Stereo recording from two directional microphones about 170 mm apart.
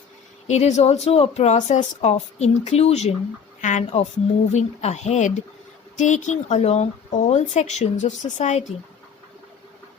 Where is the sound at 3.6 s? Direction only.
45° left (ahead or behind).